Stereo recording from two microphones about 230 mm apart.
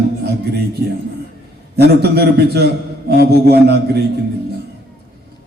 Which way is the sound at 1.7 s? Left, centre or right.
Right.